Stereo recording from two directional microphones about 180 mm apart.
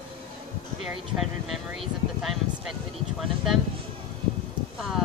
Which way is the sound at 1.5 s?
Centre (ahead or behind).